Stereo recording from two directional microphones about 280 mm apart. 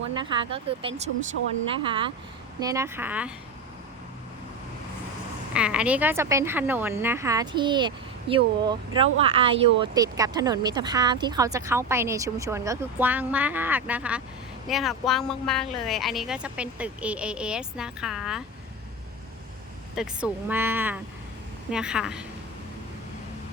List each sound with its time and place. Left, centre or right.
0.2 s speech: centre
5.5 s speech: centre
20.0 s speech: centre